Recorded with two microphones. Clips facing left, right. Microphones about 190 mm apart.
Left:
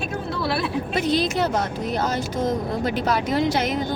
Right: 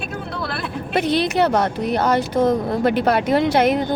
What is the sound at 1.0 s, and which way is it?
Speech, 65° right (ahead or behind).